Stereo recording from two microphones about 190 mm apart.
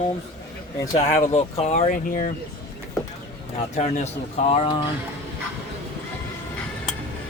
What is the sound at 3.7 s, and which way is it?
Speech, 35° left (ahead or behind).